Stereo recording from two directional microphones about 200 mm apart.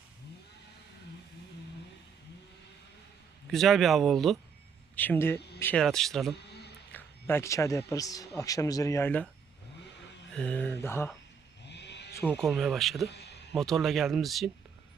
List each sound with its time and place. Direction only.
3.5 s a man's voice: centre (ahead or behind)
10.3 s a man's voice: 5° left (ahead or behind)
11.6 s a sound: 60° left (ahead or behind)
12.1 s speech: 10° left (ahead or behind)